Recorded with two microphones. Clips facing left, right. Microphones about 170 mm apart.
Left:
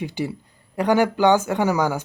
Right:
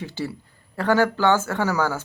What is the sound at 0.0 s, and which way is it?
Speech, 15° left (ahead or behind).